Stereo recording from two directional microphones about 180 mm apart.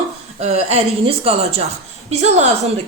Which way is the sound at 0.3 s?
35° right (ahead or behind).